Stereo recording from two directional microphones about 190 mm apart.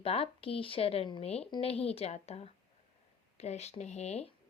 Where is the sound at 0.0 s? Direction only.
30° left (ahead or behind).